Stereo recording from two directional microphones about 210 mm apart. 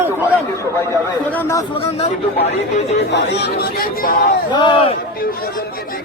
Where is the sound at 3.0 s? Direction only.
55° left (ahead or behind).